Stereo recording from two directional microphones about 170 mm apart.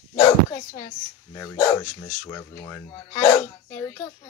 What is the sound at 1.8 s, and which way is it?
Speech, 20° left (ahead or behind).